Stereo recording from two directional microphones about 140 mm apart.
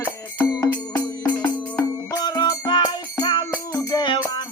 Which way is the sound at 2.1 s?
30° left (ahead or behind).